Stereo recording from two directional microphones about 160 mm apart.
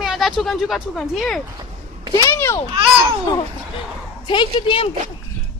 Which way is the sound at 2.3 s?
15° left (ahead or behind).